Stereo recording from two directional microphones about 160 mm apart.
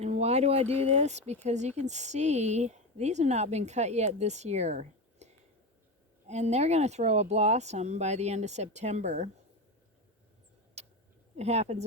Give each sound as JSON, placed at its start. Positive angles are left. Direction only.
{"t": 0.0, "sound": "speech", "side_deg": -40}
{"t": 10.8, "sound": "tick-tock", "side_deg": -40}
{"t": 11.3, "sound": "speech", "side_deg": -40}